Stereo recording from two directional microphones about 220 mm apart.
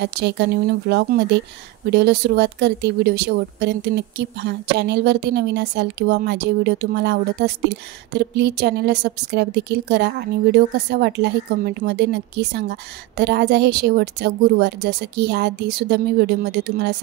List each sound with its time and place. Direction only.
0.0 s speech: 50° right (ahead or behind)